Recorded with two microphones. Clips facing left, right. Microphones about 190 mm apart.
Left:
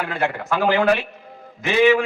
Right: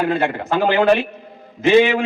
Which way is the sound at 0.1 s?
30° right (ahead or behind).